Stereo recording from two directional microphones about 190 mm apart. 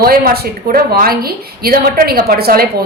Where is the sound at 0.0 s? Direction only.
50° right (ahead or behind).